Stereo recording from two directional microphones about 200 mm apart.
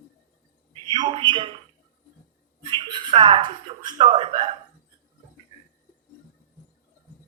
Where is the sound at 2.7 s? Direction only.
25° right (ahead or behind).